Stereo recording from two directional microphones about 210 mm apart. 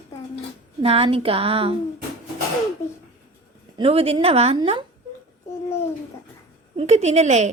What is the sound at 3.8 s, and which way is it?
A woman's voice, 25° right (ahead or behind).